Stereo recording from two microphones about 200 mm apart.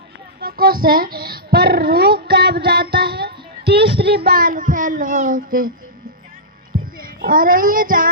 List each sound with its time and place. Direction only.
0.4 s a sound: 50° right (ahead or behind)
2.6 s music: 55° right (ahead or behind)
7.0 s speech: 45° right (ahead or behind)